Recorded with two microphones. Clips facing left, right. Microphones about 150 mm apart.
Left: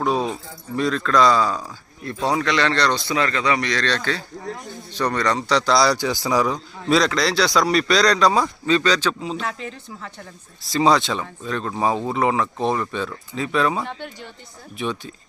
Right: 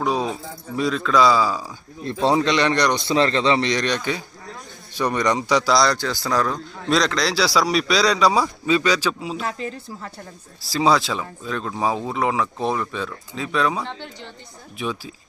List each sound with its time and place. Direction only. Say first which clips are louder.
0.0 s a man's voice: left 1 dB; centre (ahead or behind)
2.0 s a man's voice: right 3 dB; 25° right (ahead or behind)
5.7 s a man's voice: left 1 dB; 5° left (ahead or behind)
9.5 s speech: right 2 dB; 35° right (ahead or behind)
10.6 s a man's voice: left 1 dB; centre (ahead or behind)